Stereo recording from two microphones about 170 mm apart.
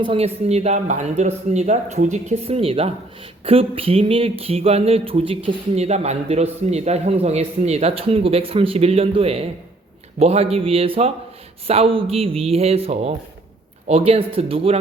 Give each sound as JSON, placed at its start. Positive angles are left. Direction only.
{"t": 0.0, "sound": "speech", "side_deg": -35}